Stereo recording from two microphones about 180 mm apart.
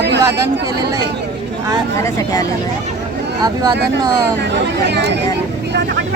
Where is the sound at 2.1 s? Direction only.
20° left (ahead or behind).